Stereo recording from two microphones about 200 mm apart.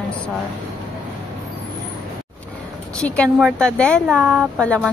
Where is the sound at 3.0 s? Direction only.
5° left (ahead or behind).